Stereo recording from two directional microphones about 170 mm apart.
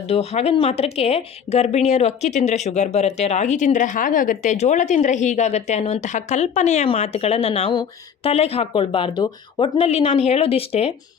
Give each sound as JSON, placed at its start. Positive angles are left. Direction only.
{"t": 0.1, "sound": "speech", "side_deg": 40}